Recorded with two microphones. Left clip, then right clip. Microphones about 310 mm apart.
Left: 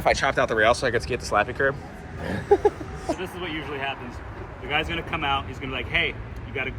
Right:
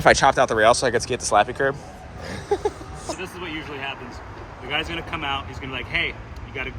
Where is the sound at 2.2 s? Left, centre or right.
Left.